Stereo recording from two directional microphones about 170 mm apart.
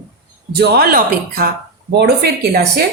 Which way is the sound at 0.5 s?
65° right (ahead or behind).